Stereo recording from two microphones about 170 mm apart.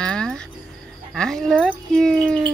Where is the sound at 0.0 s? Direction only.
5° left (ahead or behind).